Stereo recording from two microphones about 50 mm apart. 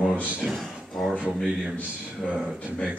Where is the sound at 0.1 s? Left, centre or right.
Right.